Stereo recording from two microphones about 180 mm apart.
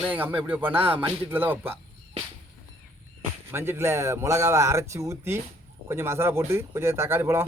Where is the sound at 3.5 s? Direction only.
15° right (ahead or behind).